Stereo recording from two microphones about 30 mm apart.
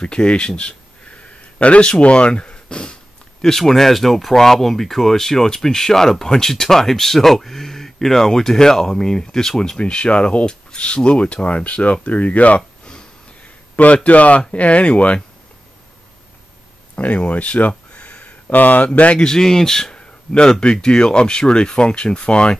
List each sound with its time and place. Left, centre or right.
0.0 s speech: left
0.6 s a sound: left
1.8 s speech: left
3.4 s speech: centre
9.8 s speech: left
10.4 s a sound: left
11.1 s speech: left
14.0 s speech: left
16.9 s speech: left
17.9 s a sound: left
18.5 s speech: left
19.1 s speech: centre; by 22.5 s left